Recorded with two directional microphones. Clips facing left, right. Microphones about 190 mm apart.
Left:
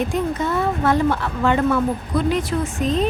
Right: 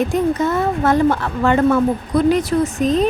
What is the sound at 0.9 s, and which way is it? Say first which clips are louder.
A woman's voice: right 4 dB; 45° right (ahead or behind).